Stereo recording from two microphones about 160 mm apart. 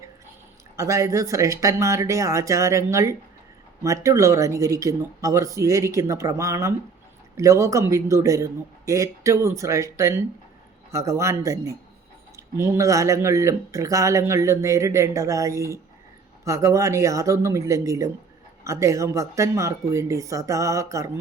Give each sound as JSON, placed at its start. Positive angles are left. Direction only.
{"t": 0.8, "sound": "speech", "side_deg": -20}